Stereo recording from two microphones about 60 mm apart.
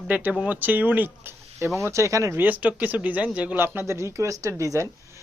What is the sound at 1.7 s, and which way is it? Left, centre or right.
Speech, right.